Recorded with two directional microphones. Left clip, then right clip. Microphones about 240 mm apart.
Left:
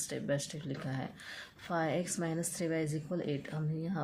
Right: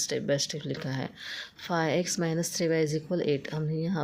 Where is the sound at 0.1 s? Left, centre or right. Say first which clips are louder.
Right 4 dB; right.